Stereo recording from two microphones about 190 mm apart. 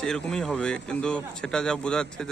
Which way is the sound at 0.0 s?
5° left (ahead or behind).